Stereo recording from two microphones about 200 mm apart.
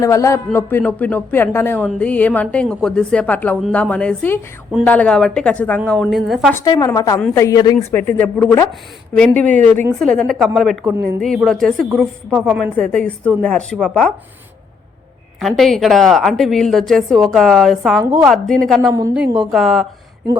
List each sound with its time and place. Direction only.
0.0 s a man's voice: 15° left (ahead or behind); by 6.5 s centre (ahead or behind)
6.5 s a man's voice: 20° left (ahead or behind)
7.2 s a woman's voice: 5° left (ahead or behind)
7.4 s a man's voice: 20° left (ahead or behind)
9.6 s speech: 35° right (ahead or behind)
10.0 s a woman's voice: centre (ahead or behind)
15.4 s a woman's voice: centre (ahead or behind)
18.8 s a woman's voice: 15° right (ahead or behind)
19.4 s a woman's voice: centre (ahead or behind)